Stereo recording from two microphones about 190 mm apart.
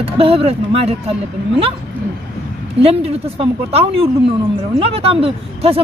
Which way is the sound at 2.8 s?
30° right (ahead or behind).